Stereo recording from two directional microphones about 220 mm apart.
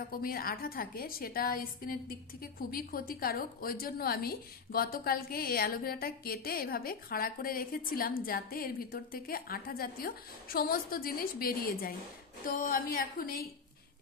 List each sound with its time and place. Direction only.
0.1 s a woman's voice: 40° left (ahead or behind)